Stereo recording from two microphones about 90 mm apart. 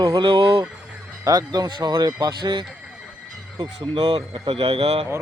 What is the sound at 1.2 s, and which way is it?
Speech, 45° right (ahead or behind).